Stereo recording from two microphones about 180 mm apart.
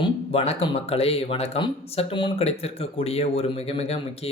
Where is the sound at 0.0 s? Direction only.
30° left (ahead or behind).